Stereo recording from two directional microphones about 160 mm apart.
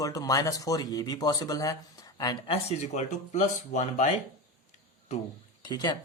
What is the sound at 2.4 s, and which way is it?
Speech, 40° left (ahead or behind).